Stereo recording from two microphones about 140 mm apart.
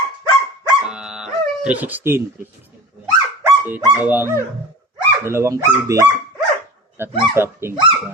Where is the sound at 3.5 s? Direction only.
15° right (ahead or behind).